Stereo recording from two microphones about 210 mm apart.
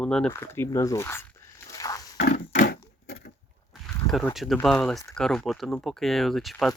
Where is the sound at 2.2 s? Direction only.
35° left (ahead or behind).